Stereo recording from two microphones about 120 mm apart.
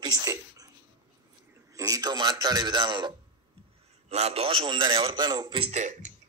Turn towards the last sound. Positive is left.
turn(degrees=-90)